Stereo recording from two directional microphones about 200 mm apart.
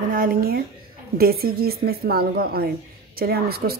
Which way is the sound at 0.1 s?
45° right (ahead or behind).